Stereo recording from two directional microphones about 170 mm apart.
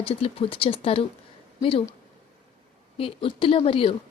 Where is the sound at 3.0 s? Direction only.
30° left (ahead or behind).